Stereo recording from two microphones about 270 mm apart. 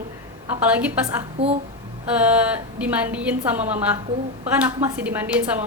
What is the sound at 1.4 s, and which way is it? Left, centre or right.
Speech, right.